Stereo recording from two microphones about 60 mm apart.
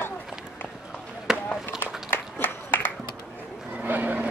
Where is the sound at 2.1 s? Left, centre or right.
Left.